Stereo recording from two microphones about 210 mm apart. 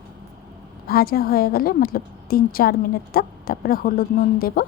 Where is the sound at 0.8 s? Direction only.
45° left (ahead or behind).